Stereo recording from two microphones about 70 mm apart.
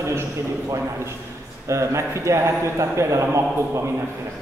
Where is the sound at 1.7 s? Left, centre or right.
Right.